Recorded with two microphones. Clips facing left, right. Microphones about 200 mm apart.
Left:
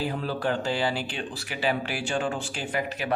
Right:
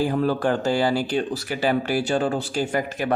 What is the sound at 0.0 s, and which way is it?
Speech, 45° right (ahead or behind).